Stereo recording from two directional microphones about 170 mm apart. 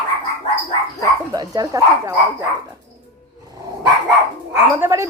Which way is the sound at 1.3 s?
20° right (ahead or behind).